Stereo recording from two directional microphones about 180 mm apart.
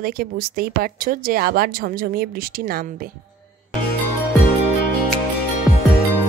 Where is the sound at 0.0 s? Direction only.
55° right (ahead or behind).